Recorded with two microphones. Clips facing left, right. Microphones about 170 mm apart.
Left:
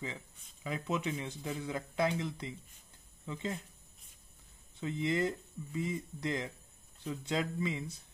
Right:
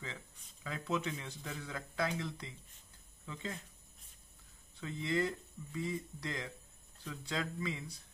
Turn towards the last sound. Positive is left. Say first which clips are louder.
# left 4 dB
turn(degrees=20)  # may be behind; listen again after turning